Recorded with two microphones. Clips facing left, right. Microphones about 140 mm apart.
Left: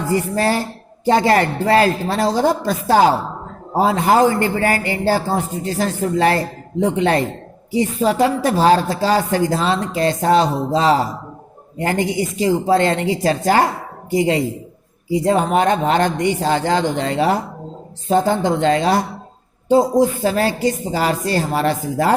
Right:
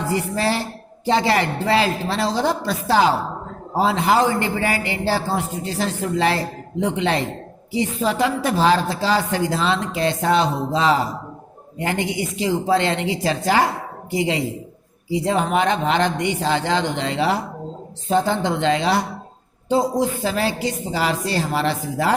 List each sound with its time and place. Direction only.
0.1 s a man's voice: 45° left (ahead or behind)